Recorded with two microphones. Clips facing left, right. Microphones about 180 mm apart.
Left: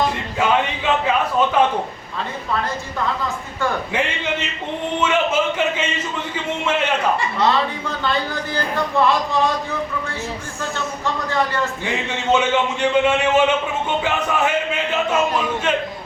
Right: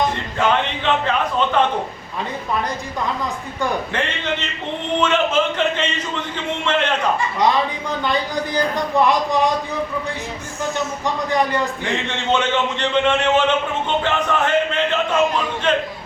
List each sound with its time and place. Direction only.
0.3 s speech: 10° left (ahead or behind)
3.9 s speech: 10° left (ahead or behind)
7.4 s speech: 15° right (ahead or behind)
11.0 s speech: 15° right (ahead or behind)
12.0 s speech: 10° left (ahead or behind)